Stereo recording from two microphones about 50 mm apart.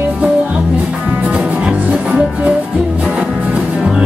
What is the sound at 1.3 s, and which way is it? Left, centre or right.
Music, right.